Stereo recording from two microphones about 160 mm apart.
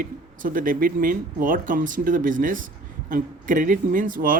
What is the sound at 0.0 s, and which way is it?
Speech, 60° right (ahead or behind).